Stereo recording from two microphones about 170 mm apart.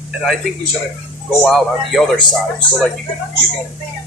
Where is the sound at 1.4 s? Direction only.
Centre (ahead or behind).